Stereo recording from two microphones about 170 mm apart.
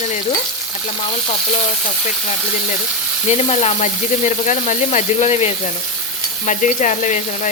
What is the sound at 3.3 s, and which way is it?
A woman's voice, 40° left (ahead or behind).